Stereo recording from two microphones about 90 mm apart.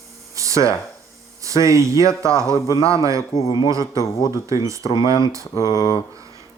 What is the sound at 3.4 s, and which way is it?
Speech, 45° left (ahead or behind).